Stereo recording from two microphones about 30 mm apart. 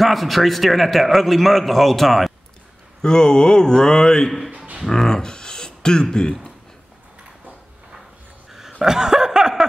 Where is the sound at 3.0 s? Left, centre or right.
Left.